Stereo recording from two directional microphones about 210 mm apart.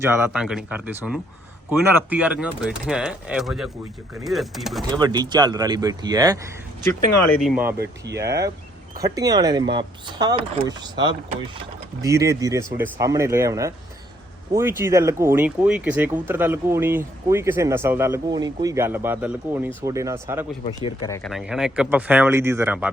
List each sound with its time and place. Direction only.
0.0 s speech: 10° right (ahead or behind)
4.8 s speech: 20° right (ahead or behind)
7.8 s speech: 55° right (ahead or behind)
9.0 s speech: 15° right (ahead or behind)
12.0 s speech: 15° right (ahead or behind)
20.7 s speech: 20° left (ahead or behind)
21.2 s speech: centre (ahead or behind)